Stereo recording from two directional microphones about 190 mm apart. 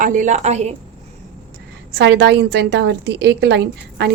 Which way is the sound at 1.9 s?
65° right (ahead or behind).